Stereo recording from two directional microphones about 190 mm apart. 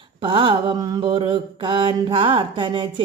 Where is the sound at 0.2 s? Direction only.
25° right (ahead or behind).